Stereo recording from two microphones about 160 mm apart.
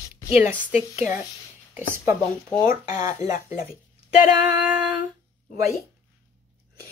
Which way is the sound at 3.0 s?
20° right (ahead or behind).